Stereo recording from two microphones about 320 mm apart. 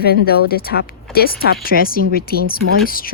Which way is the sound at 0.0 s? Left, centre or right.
Left.